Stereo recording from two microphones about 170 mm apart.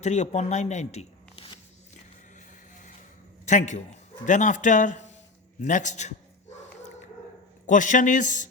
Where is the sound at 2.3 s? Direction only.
45° left (ahead or behind).